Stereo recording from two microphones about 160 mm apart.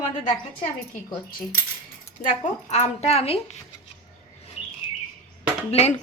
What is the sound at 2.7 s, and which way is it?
Speech, 45° left (ahead or behind).